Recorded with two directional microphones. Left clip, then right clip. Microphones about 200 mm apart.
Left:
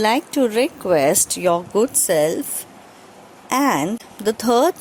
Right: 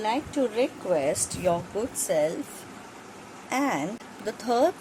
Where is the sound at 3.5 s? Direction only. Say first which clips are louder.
Left 9 dB; 45° left (ahead or behind).